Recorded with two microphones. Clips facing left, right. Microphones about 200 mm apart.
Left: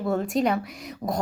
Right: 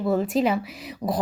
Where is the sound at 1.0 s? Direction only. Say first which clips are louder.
Right 2 dB; 15° right (ahead or behind).